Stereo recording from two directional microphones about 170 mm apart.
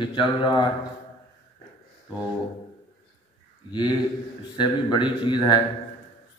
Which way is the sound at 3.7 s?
25° left (ahead or behind).